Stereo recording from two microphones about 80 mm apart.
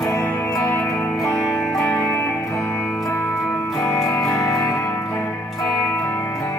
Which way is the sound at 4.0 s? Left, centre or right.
Left.